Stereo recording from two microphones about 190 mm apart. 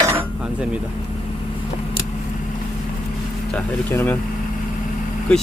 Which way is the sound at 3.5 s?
10° left (ahead or behind).